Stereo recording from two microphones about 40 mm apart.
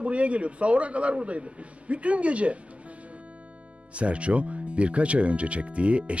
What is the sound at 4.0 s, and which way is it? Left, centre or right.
A man's voice, right.